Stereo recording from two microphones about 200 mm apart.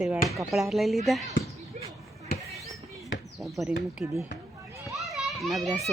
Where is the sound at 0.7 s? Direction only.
Centre (ahead or behind).